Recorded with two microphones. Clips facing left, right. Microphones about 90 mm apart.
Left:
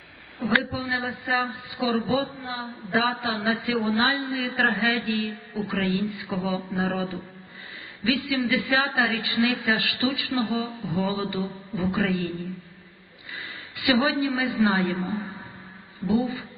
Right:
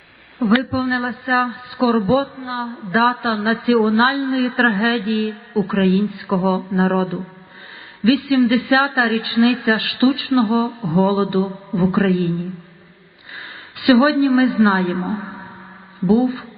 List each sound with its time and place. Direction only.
0.3 s a woman's voice: 35° right (ahead or behind)
3.0 s a woman's voice: 50° right (ahead or behind)
4.8 s a woman's voice: 35° right (ahead or behind)
13.7 s a woman's voice: 40° right (ahead or behind)